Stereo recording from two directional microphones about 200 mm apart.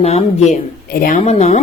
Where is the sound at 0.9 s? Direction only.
45° left (ahead or behind).